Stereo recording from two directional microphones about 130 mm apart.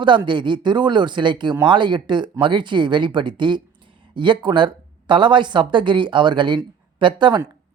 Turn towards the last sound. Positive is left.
turn(degrees=-40)  # may be behind; listen again after turning